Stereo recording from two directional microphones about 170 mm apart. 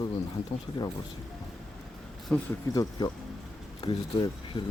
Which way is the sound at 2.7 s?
25° left (ahead or behind).